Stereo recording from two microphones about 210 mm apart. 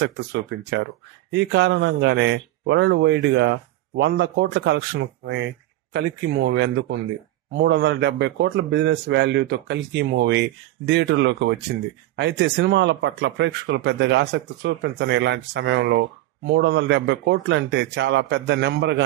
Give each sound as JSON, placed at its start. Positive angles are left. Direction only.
{"t": 0.0, "sound": "speech", "side_deg": -55}